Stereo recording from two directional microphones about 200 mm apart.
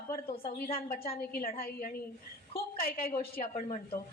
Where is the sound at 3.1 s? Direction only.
40° left (ahead or behind).